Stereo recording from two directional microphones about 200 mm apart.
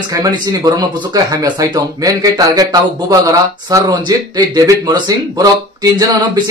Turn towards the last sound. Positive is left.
turn(degrees=-20)  # may be behind; listen again after turning